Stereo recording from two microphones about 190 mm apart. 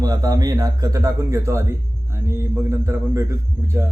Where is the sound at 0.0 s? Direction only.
20° right (ahead or behind).